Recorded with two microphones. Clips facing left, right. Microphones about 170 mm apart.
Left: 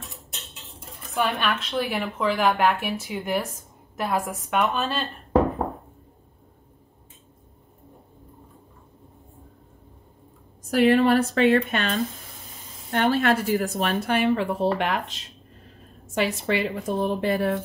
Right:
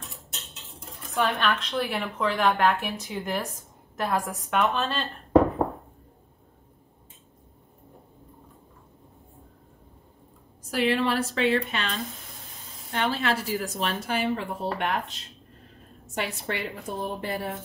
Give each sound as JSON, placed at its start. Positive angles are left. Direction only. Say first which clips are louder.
{"t": 0.7, "sound": "speech", "louder": "left 1 dB", "side_deg": 5}
{"t": 10.7, "sound": "a woman's voice", "louder": "left 7 dB", "side_deg": 50}